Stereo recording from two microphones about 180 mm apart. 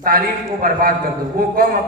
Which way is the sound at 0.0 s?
50° right (ahead or behind).